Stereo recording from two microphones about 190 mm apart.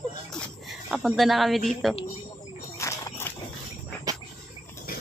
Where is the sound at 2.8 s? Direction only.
15° left (ahead or behind).